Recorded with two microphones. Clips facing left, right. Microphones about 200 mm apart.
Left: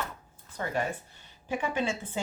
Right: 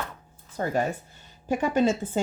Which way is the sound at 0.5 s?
40° right (ahead or behind).